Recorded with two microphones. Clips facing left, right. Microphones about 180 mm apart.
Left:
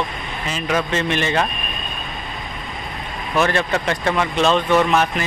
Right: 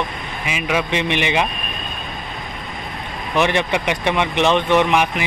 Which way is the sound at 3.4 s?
15° right (ahead or behind).